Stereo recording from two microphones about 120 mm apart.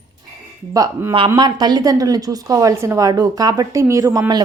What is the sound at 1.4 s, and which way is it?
A woman's voice, 35° right (ahead or behind).